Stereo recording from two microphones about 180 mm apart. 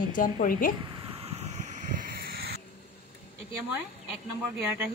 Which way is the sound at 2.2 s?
60° right (ahead or behind).